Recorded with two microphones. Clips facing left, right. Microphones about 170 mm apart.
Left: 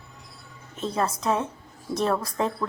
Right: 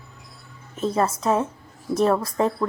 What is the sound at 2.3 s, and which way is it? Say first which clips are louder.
Speech: right 5 dB; 35° right (ahead or behind).